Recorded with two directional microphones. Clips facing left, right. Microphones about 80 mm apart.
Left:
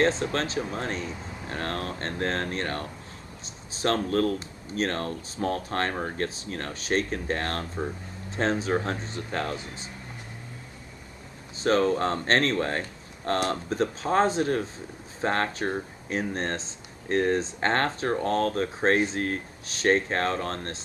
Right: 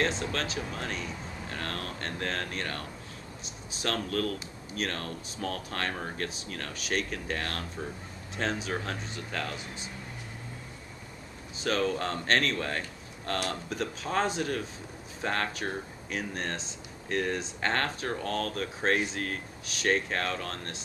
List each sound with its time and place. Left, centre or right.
0.0 s speech: left
11.5 s speech: left